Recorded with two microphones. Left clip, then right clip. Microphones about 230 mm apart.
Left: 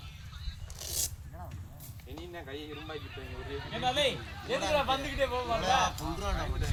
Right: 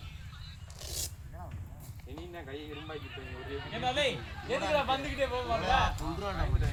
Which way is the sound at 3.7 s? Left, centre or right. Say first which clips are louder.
Left 1 dB; left.